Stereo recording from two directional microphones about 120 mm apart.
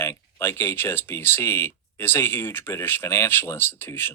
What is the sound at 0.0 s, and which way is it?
Speech, 20° left (ahead or behind).